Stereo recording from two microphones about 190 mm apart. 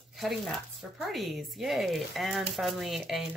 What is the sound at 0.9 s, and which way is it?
A woman's voice, centre (ahead or behind).